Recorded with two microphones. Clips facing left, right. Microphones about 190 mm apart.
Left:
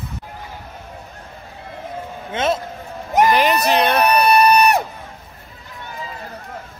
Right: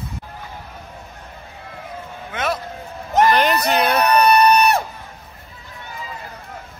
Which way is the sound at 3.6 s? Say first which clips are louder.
Left 2 dB; centre (ahead or behind).